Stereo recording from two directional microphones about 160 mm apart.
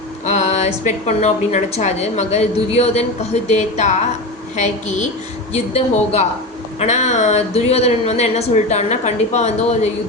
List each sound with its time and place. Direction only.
0.3 s a woman's voice: 45° left (ahead or behind)